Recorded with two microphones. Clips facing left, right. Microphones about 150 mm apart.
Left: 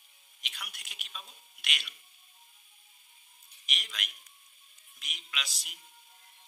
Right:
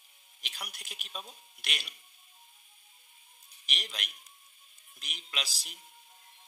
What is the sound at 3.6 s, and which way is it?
Speech, 35° right (ahead or behind).